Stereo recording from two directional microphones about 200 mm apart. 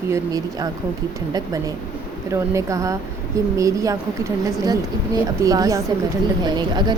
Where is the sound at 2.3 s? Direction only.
15° right (ahead or behind).